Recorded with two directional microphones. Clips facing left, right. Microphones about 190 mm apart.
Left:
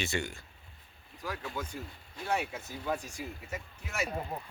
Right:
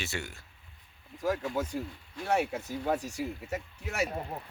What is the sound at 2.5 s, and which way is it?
Speech, 70° right (ahead or behind).